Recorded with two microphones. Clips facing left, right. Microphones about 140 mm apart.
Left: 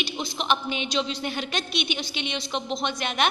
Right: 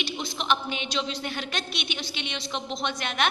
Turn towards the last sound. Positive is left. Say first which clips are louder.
# left 2 dB
turn(degrees=10)  # may be behind; listen again after turning